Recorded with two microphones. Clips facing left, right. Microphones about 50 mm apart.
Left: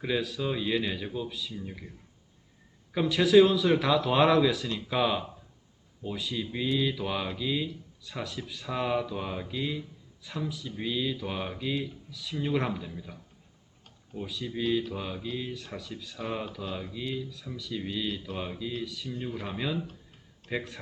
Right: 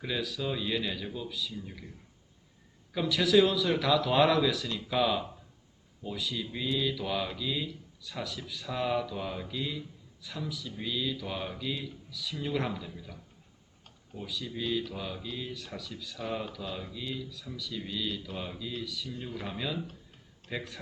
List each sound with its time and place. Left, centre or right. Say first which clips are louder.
0.0 s speech: left 4 dB; centre
2.9 s speech: left 4 dB; centre
14.2 s speech: left 3 dB; centre